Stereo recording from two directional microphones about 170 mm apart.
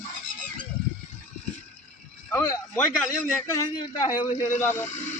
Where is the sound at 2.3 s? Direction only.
15° left (ahead or behind).